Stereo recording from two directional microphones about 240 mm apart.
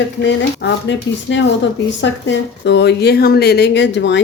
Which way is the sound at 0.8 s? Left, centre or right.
Left.